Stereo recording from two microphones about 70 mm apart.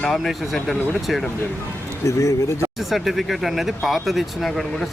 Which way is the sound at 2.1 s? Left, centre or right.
Left.